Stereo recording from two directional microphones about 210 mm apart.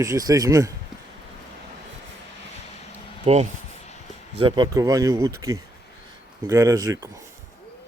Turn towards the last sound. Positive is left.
turn(degrees=-15)  # may be behind; listen again after turning